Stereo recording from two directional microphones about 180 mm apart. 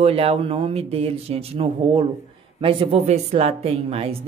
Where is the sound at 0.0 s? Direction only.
35° right (ahead or behind).